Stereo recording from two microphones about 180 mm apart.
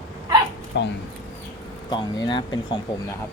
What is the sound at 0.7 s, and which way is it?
Speech, 75° left (ahead or behind).